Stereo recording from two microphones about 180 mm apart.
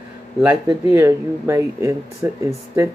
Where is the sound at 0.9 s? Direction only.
15° right (ahead or behind).